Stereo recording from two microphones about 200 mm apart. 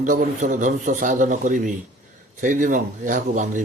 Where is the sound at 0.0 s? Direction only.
40° right (ahead or behind).